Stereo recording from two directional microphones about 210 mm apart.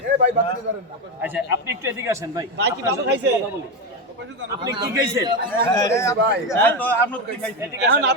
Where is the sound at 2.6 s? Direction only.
55° right (ahead or behind).